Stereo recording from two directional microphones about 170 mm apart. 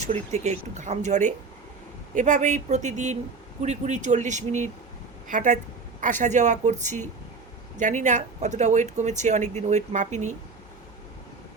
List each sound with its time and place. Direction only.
0.1 s speech: 40° right (ahead or behind)